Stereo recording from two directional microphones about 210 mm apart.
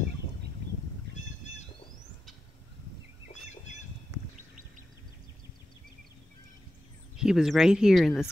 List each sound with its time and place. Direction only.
3.3 s bird: 35° left (ahead or behind)
7.2 s speech: centre (ahead or behind)